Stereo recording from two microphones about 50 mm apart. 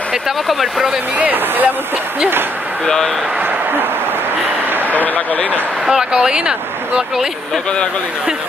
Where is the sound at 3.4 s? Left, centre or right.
Right.